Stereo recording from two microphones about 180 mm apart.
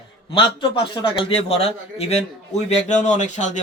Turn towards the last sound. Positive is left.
turn(degrees=40)  # may be behind; listen again after turning